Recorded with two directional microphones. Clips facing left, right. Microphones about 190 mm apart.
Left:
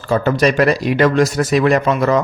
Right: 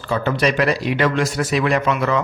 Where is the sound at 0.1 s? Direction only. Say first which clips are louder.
Left 5 dB; 45° left (ahead or behind).